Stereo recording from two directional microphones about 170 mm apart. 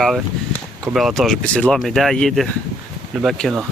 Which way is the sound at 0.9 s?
Centre (ahead or behind).